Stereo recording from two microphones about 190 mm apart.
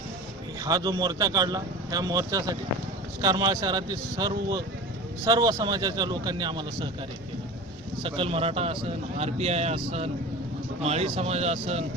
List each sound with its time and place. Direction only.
0.6 s a man's voice: 20° right (ahead or behind)
8.0 s speech: 30° right (ahead or behind)